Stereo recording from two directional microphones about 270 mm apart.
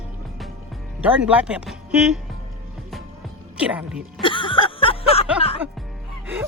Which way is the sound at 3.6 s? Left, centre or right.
Centre.